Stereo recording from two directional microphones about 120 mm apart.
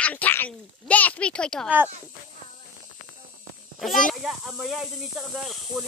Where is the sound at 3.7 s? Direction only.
Centre (ahead or behind).